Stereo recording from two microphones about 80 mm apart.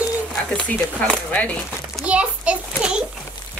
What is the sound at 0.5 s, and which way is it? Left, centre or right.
Speech, centre.